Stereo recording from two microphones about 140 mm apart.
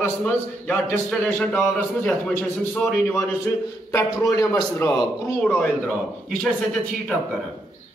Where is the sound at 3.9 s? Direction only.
20° left (ahead or behind).